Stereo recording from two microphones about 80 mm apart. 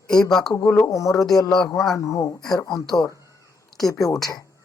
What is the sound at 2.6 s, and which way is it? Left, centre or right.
Speech, left.